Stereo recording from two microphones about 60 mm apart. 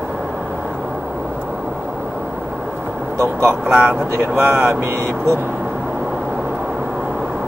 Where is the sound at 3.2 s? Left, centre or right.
Right.